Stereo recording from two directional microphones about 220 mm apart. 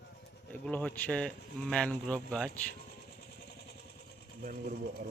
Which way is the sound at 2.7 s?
45° left (ahead or behind).